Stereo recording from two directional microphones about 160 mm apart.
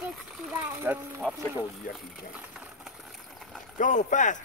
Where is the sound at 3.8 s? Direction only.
50° left (ahead or behind).